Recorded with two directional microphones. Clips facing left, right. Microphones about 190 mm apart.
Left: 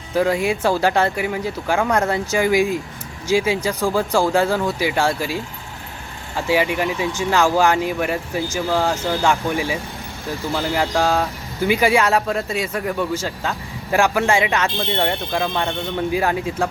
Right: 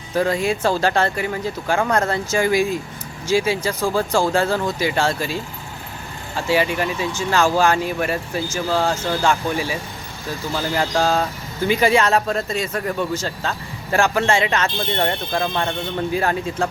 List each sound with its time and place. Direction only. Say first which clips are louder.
0.1 s speech: left 1 dB; 15° left (ahead or behind)
10.9 s speech: right 1 dB; centre (ahead or behind)
11.6 s speech: even; 15° left (ahead or behind)
14.9 s speech: even; centre (ahead or behind)
16.1 s speech: even; 10° left (ahead or behind)